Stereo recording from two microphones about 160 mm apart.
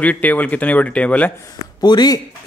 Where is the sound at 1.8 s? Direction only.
25° left (ahead or behind).